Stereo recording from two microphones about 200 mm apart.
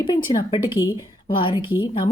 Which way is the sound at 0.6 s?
10° right (ahead or behind).